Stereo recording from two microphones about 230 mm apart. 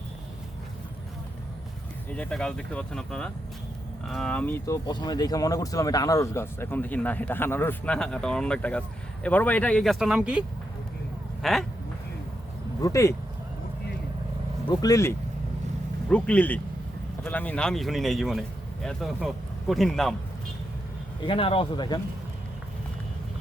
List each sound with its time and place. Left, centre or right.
2.0 s speech: centre
11.4 s speech: centre
12.8 s speech: centre
14.7 s speech: centre
21.2 s speech: left